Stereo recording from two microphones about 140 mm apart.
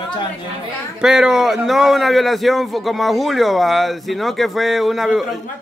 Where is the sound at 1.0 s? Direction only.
5° right (ahead or behind).